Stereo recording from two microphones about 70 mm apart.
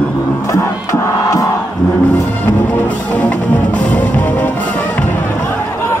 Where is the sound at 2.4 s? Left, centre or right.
Left.